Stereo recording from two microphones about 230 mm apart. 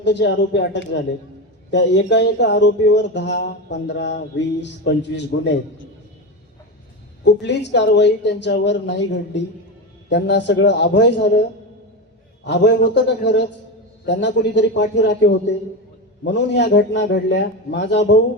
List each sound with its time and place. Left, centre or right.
0.0 s speech: left
7.3 s speech: left
12.5 s speech: left